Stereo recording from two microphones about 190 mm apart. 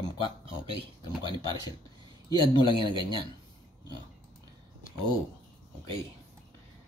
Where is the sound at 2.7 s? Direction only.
25° right (ahead or behind).